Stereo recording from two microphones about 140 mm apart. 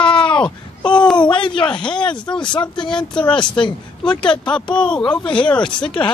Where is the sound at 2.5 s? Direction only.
35° left (ahead or behind).